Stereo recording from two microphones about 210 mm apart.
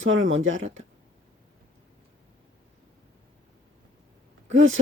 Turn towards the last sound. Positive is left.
turn(degrees=-70)  # may be behind; listen again after turning